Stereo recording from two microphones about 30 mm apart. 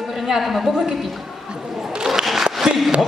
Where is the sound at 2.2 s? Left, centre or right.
Centre.